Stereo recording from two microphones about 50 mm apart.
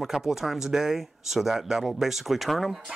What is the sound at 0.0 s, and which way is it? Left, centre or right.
Speech, centre.